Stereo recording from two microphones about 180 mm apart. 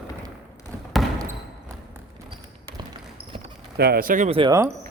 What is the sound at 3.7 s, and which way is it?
Speech, 60° right (ahead or behind).